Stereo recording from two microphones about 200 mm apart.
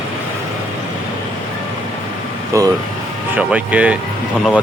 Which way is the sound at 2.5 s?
15° right (ahead or behind).